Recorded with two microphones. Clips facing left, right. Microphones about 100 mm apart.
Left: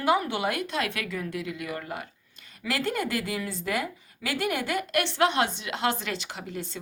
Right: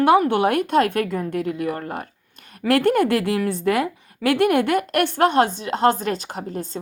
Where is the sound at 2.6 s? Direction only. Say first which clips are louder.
Right 12 dB; 60° right (ahead or behind).